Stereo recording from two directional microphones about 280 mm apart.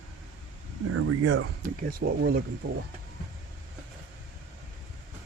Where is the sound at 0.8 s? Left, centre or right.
Right.